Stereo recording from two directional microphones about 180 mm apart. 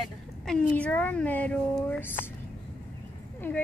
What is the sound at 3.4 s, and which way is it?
Speech, 15° left (ahead or behind).